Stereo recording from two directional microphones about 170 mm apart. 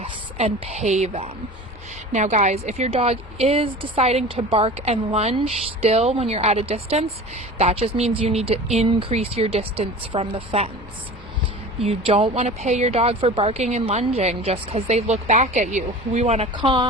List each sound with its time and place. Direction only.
0.0 s a woman's voice: 40° right (ahead or behind)
11.8 s speech: 35° right (ahead or behind)
16.6 s speech: 25° right (ahead or behind)